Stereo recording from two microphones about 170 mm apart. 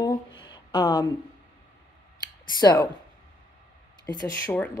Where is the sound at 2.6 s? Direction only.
20° left (ahead or behind).